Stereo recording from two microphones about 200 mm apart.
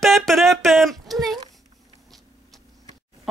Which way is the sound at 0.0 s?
Centre (ahead or behind).